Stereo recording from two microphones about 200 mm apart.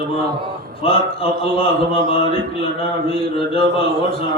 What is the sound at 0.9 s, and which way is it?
A man's voice, 30° left (ahead or behind).